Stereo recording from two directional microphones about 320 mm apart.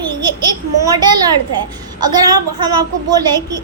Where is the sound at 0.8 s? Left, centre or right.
Centre.